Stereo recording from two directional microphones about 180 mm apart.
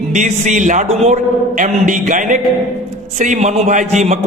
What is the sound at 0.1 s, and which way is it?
A man's voice, 40° right (ahead or behind).